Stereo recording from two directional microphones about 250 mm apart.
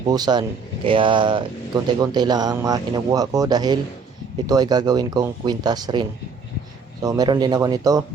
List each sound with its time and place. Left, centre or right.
0.1 s speech: centre